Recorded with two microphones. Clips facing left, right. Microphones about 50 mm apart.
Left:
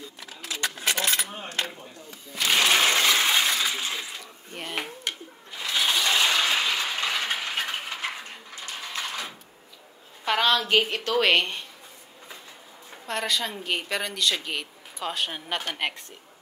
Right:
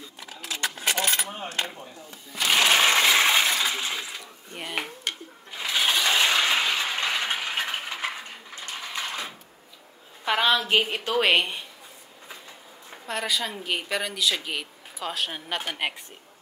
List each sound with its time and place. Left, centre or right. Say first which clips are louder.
0.2 s coin: right 1 dB; centre
1.8 s a sound: right 1 dB; centre
10.2 s a woman's voice: even; centre
12.9 s speech: even; centre